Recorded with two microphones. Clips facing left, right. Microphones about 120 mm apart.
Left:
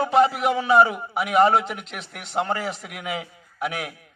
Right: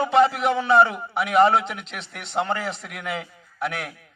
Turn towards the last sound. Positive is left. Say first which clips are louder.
# even
turn(degrees=5)  # may be behind; listen again after turning